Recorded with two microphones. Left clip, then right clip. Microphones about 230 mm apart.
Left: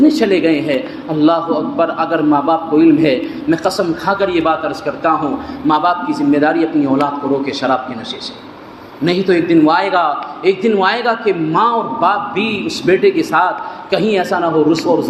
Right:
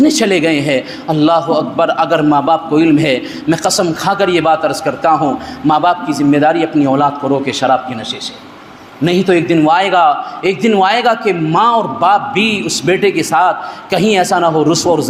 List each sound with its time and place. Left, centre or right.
0.0 s a man's voice: right
9.0 s a man's voice: right